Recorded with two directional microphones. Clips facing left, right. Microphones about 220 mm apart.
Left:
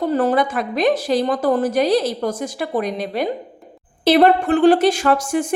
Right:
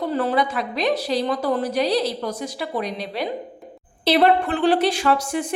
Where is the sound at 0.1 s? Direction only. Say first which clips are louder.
Left 3 dB; 45° left (ahead or behind).